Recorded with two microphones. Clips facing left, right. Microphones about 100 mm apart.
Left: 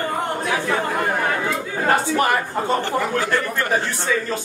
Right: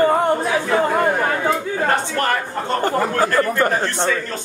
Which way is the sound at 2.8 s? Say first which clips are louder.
Right 3 dB; 45° right (ahead or behind).